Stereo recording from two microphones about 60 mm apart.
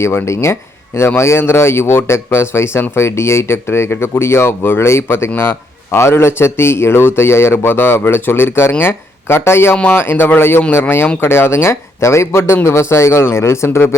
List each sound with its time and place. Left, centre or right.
0.0 s speech: left